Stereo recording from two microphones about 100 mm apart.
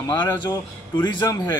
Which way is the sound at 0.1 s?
50° left (ahead or behind).